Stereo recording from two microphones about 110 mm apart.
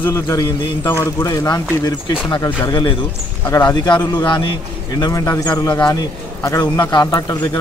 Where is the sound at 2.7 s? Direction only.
45° left (ahead or behind).